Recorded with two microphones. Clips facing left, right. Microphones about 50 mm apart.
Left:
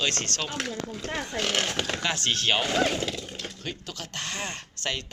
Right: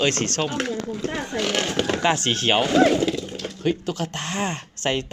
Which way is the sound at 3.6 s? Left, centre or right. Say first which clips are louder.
Right 13 dB; right.